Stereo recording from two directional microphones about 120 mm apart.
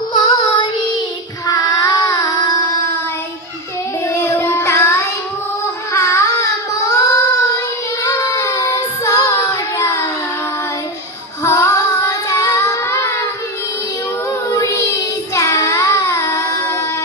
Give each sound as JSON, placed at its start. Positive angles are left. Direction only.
{"t": 0.2, "sound": "child singing", "side_deg": 35}
{"t": 4.1, "sound": "child singing", "side_deg": 20}
{"t": 5.9, "sound": "a sound", "side_deg": 25}
{"t": 8.0, "sound": "child singing", "side_deg": 25}
{"t": 11.4, "sound": "child singing", "side_deg": 25}
{"t": 14.5, "sound": "child singing", "side_deg": 25}